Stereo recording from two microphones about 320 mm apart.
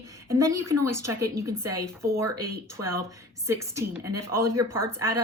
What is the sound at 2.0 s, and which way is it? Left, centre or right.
Speech, centre.